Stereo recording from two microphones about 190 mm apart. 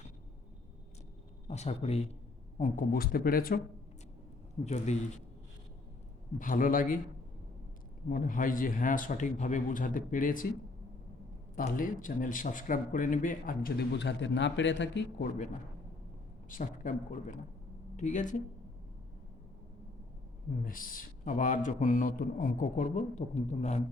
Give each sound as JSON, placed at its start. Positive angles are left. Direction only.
{"t": 1.5, "sound": "speech", "side_deg": 35}
{"t": 4.6, "sound": "speech", "side_deg": 35}
{"t": 6.4, "sound": "speech", "side_deg": 45}
{"t": 8.1, "sound": "speech", "side_deg": 45}
{"t": 11.5, "sound": "speech", "side_deg": 45}
{"t": 16.5, "sound": "speech", "side_deg": 45}
{"t": 20.7, "sound": "speech", "side_deg": 45}